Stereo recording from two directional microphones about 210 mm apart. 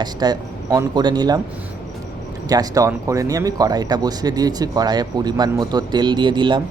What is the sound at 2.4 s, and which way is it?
Speech, 15° right (ahead or behind).